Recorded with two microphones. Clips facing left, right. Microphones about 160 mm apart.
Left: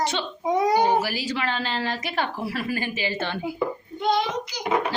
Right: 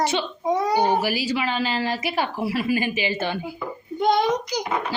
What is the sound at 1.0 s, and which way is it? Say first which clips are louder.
A woman's voice: right 2 dB; 15° right (ahead or behind).